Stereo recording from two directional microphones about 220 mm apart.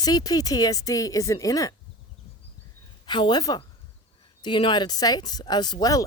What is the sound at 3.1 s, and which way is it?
Speech, 20° left (ahead or behind).